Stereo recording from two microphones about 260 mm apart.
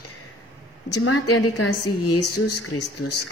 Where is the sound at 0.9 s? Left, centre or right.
Left.